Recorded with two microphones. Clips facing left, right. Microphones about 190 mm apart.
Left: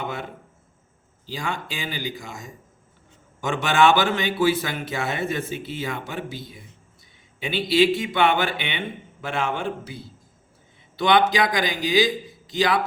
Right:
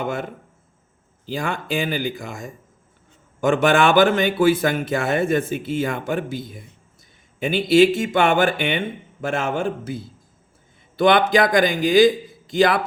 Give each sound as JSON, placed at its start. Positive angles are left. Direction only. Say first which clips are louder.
{"t": 0.0, "sound": "a man's voice", "louder": "right 5 dB", "side_deg": -50}
{"t": 1.3, "sound": "a man's voice", "louder": "right 6 dB", "side_deg": -55}